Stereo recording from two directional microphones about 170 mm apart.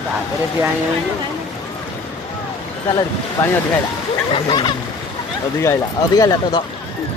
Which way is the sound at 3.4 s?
15° left (ahead or behind).